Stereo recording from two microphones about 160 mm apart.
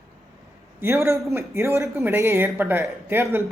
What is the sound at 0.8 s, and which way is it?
Speech, 15° right (ahead or behind).